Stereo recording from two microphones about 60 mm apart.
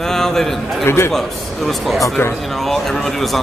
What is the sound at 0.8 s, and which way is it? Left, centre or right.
Speech, left.